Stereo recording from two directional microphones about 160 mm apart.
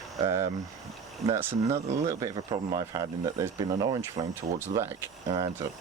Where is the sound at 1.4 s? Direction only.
15° right (ahead or behind).